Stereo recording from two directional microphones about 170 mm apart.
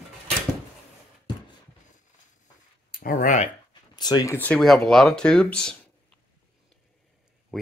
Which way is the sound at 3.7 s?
25° left (ahead or behind).